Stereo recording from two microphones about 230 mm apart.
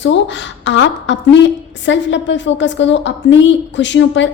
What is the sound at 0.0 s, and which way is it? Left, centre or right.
A woman's voice, left.